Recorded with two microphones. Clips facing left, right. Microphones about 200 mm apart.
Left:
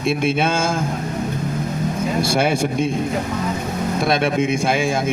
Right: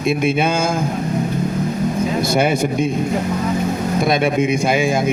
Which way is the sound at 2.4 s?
Centre (ahead or behind).